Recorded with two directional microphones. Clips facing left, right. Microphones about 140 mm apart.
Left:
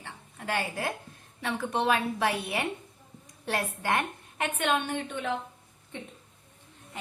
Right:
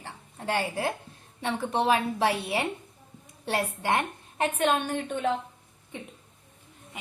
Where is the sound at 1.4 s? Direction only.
30° right (ahead or behind).